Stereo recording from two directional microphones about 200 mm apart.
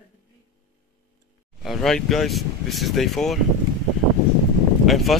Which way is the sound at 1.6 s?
Centre (ahead or behind).